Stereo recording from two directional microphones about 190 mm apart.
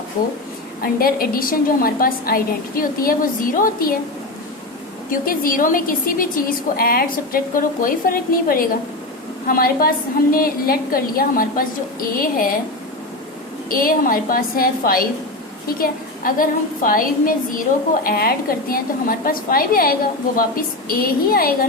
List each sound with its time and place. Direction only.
0.8 s a woman's voice: 50° left (ahead or behind)
5.2 s a woman's voice: 50° left (ahead or behind)
13.7 s a woman's voice: 50° left (ahead or behind)